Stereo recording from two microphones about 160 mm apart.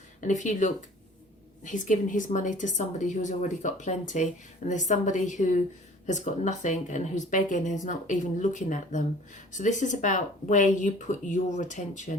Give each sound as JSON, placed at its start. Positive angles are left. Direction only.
{"t": 0.2, "sound": "speech", "side_deg": 50}